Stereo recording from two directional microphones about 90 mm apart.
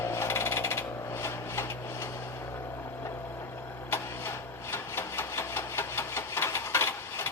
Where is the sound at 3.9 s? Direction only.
30° left (ahead or behind).